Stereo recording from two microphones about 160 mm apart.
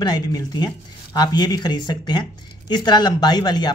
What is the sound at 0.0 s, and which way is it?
Speech, 25° left (ahead or behind).